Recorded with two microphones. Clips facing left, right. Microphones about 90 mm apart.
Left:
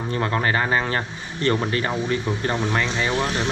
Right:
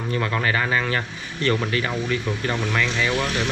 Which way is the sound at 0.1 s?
20° left (ahead or behind).